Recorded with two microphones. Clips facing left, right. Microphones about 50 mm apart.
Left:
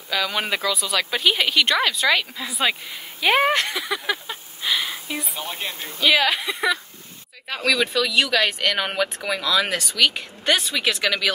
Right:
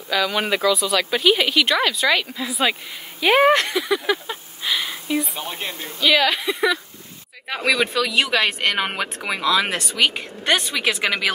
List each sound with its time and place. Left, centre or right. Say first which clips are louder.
0.1 s speech: right 3 dB; centre
5.9 s speech: right 1 dB; centre
7.4 s speech: right 1 dB; centre
8.7 s speech: even; centre